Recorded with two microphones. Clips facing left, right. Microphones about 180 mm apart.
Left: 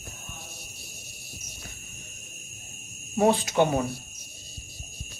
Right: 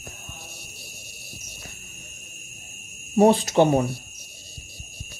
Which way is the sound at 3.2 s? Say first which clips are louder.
Right 5 dB; 35° right (ahead or behind).